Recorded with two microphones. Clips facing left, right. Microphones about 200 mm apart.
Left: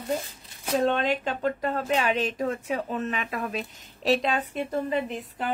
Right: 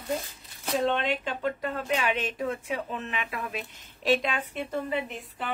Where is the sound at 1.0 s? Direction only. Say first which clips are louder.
Left 3 dB; 40° left (ahead or behind).